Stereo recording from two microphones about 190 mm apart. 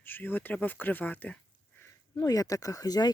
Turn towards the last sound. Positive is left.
turn(degrees=20)  # may be behind; listen again after turning